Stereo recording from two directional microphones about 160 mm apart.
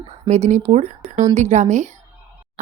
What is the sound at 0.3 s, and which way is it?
A woman's voice, 45° right (ahead or behind).